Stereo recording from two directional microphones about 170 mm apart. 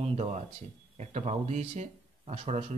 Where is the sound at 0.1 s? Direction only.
40° right (ahead or behind).